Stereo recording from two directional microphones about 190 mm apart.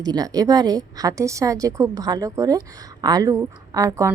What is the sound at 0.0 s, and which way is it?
A woman's voice, 20° right (ahead or behind).